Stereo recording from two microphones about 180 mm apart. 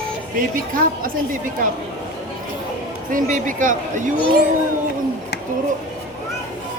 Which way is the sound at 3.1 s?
50° right (ahead or behind).